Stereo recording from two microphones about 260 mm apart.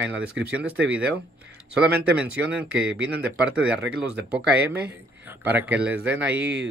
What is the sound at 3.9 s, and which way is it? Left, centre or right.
Speech, right.